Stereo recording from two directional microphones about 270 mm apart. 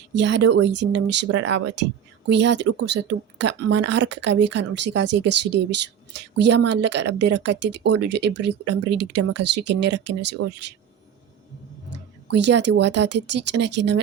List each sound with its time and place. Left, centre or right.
0.1 s speech: right
11.9 s speech: right